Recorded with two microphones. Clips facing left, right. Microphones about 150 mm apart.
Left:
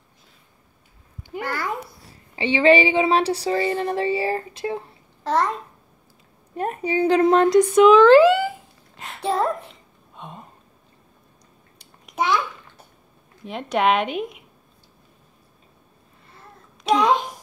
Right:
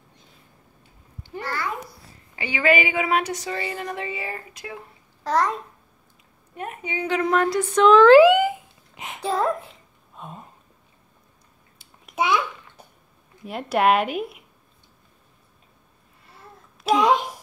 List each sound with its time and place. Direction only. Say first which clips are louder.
2.3 s speech: left 5 dB; 25° left (ahead or behind)
5.2 s a woman's voice: left 1 dB; centre (ahead or behind)
6.5 s speech: left 8 dB; 35° left (ahead or behind); by 8.0 s 10° left (ahead or behind)
8.0 s a sound: even; 10° right (ahead or behind)
9.2 s a woman's voice: left 1 dB; centre (ahead or behind)
10.1 s a sound: even; centre (ahead or behind)
11.8 s babbling: even; 5° right (ahead or behind)
13.5 s a woman's voice: right 1 dB; 5° right (ahead or behind)
16.8 s a child's voice: even; 5° right (ahead or behind)